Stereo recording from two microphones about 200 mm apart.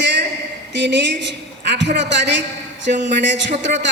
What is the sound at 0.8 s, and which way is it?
Speech, 60° right (ahead or behind).